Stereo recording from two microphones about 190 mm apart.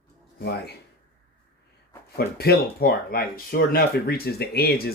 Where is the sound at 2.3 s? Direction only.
55° left (ahead or behind).